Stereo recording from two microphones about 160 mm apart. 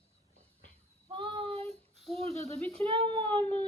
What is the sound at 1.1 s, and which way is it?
Child singing, 35° right (ahead or behind).